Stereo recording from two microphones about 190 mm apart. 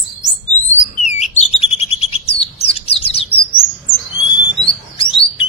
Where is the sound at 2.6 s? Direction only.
30° left (ahead or behind).